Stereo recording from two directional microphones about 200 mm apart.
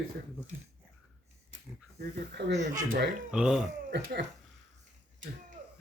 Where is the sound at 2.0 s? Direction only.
55° right (ahead or behind).